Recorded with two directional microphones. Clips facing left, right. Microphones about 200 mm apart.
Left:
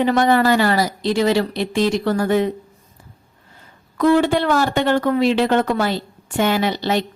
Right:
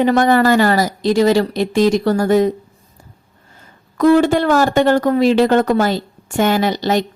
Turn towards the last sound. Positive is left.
turn(degrees=-45)  # may be behind; listen again after turning